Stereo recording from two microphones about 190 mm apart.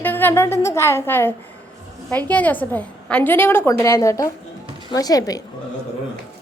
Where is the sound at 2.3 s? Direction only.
10° left (ahead or behind).